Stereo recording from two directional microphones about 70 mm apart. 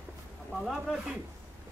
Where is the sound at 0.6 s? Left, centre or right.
Centre.